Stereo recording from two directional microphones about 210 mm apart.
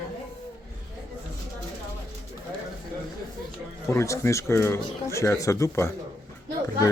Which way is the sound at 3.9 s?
15° left (ahead or behind).